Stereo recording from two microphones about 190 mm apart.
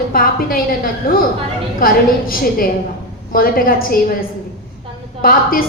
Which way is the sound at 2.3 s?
50° left (ahead or behind).